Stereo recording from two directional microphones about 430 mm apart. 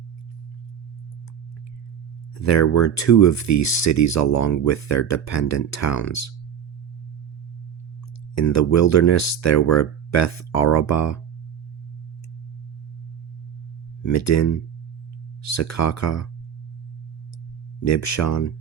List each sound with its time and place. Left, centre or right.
2.3 s speech: left
8.4 s speech: left
14.0 s speech: left
17.8 s speech: left